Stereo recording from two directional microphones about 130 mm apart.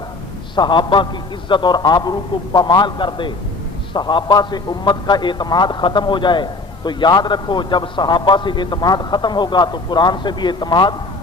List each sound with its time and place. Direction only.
0.5 s a man's voice: 35° left (ahead or behind)